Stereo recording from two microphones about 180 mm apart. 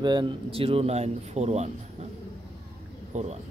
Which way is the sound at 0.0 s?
25° right (ahead or behind).